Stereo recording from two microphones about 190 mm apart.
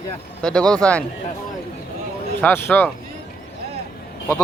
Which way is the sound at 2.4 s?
10° left (ahead or behind).